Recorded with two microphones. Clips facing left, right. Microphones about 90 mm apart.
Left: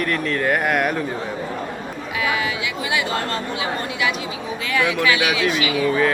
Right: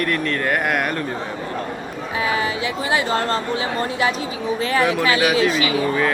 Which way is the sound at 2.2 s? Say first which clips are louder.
Right 1 dB; 35° right (ahead or behind).